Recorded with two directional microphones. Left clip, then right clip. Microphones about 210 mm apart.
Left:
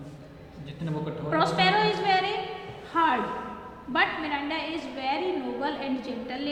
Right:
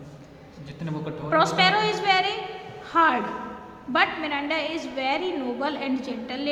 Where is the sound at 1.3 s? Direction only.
30° right (ahead or behind).